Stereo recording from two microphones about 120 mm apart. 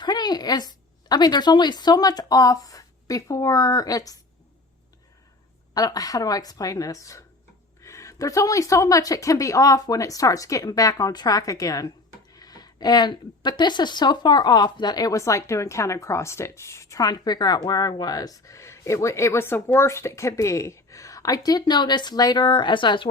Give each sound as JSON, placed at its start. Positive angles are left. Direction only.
{"t": 0.0, "sound": "a woman's voice", "side_deg": 35}
{"t": 5.7, "sound": "speech", "side_deg": 30}